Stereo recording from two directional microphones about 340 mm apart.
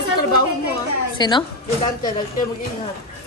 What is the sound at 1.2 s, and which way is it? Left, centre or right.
Speech, centre.